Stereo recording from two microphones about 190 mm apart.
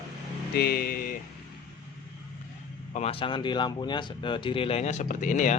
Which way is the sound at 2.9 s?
30° left (ahead or behind).